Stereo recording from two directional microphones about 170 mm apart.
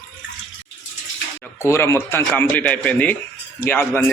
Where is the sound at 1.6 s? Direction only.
15° left (ahead or behind).